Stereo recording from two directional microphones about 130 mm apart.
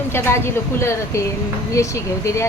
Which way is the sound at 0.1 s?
20° left (ahead or behind).